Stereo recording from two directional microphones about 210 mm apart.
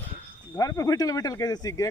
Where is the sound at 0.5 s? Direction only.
15° left (ahead or behind).